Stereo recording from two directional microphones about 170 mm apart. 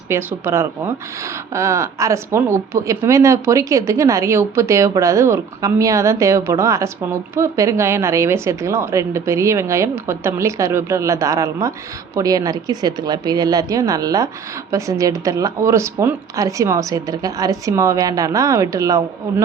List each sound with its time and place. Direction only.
0.1 s speech: 15° right (ahead or behind)